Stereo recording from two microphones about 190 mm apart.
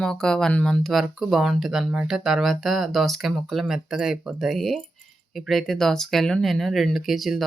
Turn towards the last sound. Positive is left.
turn(degrees=0)  # may be behind; listen again after turning